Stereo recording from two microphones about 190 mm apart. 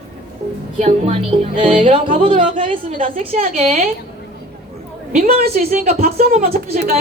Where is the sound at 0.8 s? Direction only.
35° right (ahead or behind).